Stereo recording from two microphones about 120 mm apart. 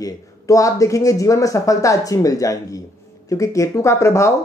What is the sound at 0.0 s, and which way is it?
Speech, 30° left (ahead or behind).